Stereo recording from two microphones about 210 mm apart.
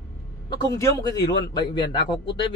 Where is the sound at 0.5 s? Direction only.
15° left (ahead or behind).